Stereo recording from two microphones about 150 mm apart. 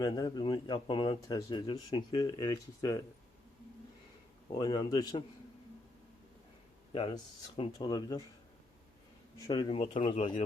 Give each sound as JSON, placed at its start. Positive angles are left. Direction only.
{"t": 0.0, "sound": "speech", "side_deg": 30}
{"t": 4.5, "sound": "speech", "side_deg": 30}
{"t": 6.9, "sound": "speech", "side_deg": 30}
{"t": 9.5, "sound": "speech", "side_deg": 30}